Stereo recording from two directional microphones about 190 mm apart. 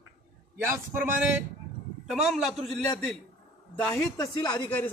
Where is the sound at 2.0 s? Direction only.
Centre (ahead or behind).